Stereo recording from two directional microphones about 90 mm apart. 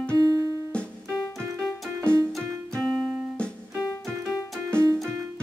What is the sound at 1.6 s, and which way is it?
Music, 10° left (ahead or behind).